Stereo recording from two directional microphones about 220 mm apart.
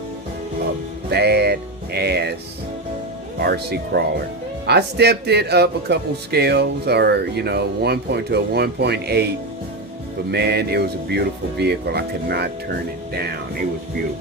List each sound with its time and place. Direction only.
1.1 s music: 45° right (ahead or behind)
3.4 s speech: 45° right (ahead or behind)
10.3 s speech: 45° right (ahead or behind)